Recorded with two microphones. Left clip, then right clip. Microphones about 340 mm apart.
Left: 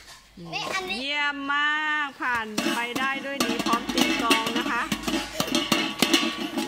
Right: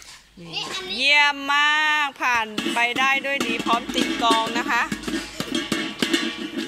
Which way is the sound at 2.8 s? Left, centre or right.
Centre.